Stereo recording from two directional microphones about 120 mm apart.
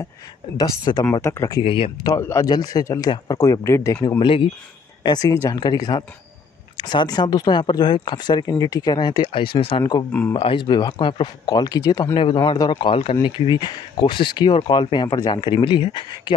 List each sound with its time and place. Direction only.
0.6 s speech: 35° left (ahead or behind)
1.2 s speech: 25° left (ahead or behind)
1.6 s speech: 50° left (ahead or behind)
2.0 s speech: 25° left (ahead or behind)
4.2 s speech: 45° left (ahead or behind)
5.0 s speech: 35° left (ahead or behind)
12.1 s speech: 45° left (ahead or behind)
12.4 s speech: 35° left (ahead or behind); by 13.3 s 50° left (ahead or behind)
13.5 s speech: 35° left (ahead or behind)